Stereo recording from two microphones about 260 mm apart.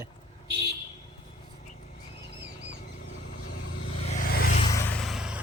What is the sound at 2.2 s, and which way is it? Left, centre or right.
Vehicle, left.